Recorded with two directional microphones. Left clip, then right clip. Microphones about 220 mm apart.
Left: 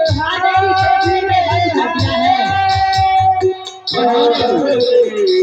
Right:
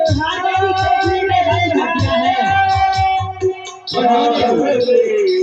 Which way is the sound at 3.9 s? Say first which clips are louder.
Left 1 dB; 35° left (ahead or behind).